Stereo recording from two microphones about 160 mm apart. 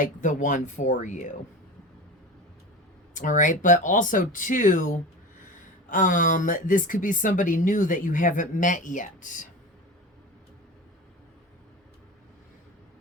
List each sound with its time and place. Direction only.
0.0 s speech: 55° left (ahead or behind)
3.2 s speech: 55° left (ahead or behind)